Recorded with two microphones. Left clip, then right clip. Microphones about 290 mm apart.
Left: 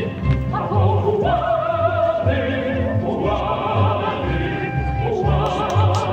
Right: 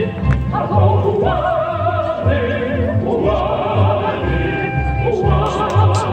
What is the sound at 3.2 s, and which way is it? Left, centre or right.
Music, left.